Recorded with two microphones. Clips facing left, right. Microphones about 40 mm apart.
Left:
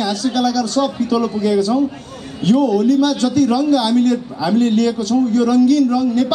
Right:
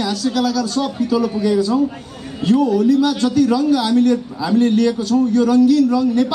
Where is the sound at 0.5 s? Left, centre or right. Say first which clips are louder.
Left 1 dB; centre.